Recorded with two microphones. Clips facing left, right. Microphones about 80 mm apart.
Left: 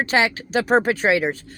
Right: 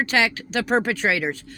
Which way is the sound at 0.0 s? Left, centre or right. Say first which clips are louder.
Left 2 dB; left.